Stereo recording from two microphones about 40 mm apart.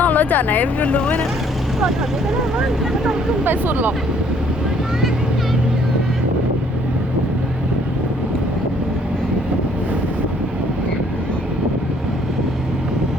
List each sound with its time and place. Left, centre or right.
0.0 s speech: left
2.6 s speech: centre
3.4 s speech: right